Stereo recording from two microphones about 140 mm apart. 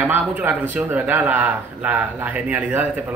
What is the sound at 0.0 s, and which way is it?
A man's voice, 10° right (ahead or behind).